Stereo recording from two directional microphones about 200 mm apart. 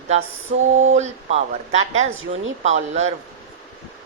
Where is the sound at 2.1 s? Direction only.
90° right.